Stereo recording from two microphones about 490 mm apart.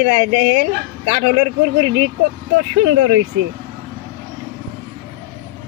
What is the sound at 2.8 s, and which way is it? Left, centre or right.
Speech, right.